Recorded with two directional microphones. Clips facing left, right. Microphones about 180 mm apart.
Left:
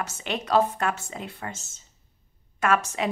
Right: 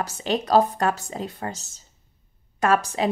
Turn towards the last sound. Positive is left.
turn(degrees=-35)  # may be behind; listen again after turning